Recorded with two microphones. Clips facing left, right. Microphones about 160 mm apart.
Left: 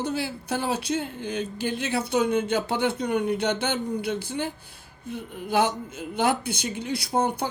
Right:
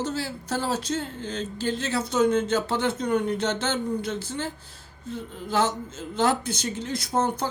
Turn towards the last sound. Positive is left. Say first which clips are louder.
# even
turn(degrees=10)  # may be behind; listen again after turning